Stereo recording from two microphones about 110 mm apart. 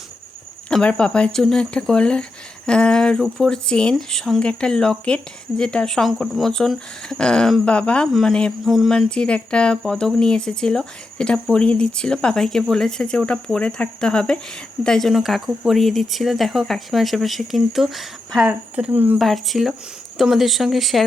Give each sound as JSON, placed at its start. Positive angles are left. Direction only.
{"t": 0.7, "sound": "speech", "side_deg": 10}
{"t": 18.4, "sound": "speech", "side_deg": -15}
{"t": 19.2, "sound": "speech", "side_deg": 0}